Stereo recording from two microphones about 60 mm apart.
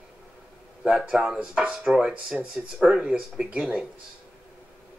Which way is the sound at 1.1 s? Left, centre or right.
Centre.